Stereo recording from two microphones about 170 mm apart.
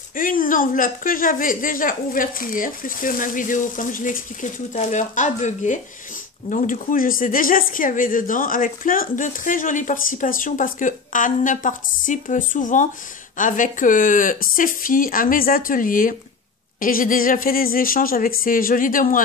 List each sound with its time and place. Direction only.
0.1 s a woman's voice: 55° left (ahead or behind)